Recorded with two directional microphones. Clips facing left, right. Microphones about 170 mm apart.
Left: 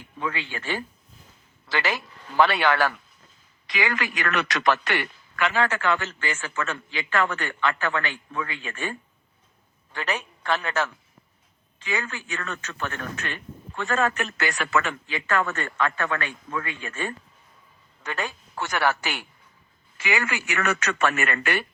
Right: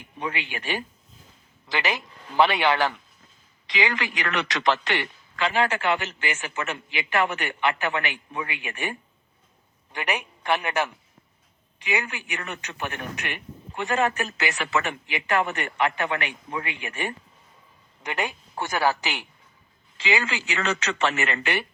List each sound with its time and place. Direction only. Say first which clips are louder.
0.0 s a man's voice: left 1 dB; 20° right (ahead or behind)